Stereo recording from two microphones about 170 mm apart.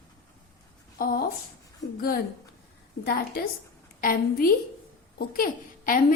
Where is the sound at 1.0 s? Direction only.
60° left (ahead or behind).